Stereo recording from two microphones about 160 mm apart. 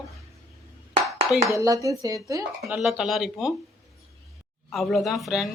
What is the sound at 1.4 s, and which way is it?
Speech, 20° right (ahead or behind).